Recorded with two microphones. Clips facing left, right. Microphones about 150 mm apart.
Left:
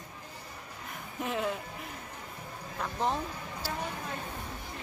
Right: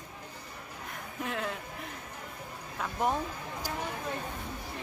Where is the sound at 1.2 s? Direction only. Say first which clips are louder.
Left 3 dB; centre (ahead or behind).